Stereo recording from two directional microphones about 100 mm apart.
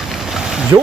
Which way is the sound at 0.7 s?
35° right (ahead or behind).